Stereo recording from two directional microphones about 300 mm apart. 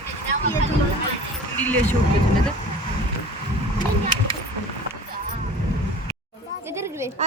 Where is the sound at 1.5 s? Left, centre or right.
Centre.